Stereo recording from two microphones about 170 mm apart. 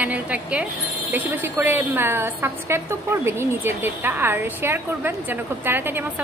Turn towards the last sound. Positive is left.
turn(degrees=-10)  # may be behind; listen again after turning